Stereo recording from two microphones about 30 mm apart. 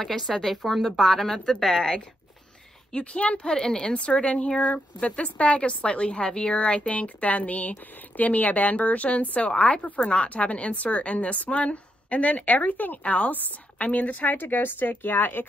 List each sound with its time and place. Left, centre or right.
0.0 s speech: centre
1.4 s speech: left
3.0 s speech: left
3.4 s speech: left
3.9 s a woman's voice: left
4.6 s a woman's voice: left
9.9 s a woman's voice: left
10.3 s a woman's voice: left
13.3 s a woman's voice: left
13.8 s speech: left